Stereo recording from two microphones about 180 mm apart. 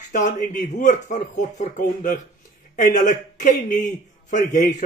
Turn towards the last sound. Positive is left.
turn(degrees=45)  # may be behind; listen again after turning